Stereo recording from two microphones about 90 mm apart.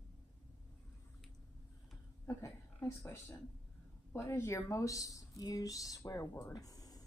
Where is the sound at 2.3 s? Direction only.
35° left (ahead or behind).